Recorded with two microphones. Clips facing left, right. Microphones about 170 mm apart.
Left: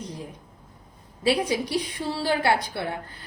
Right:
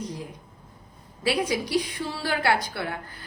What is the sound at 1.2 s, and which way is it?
A woman's voice, 25° left (ahead or behind).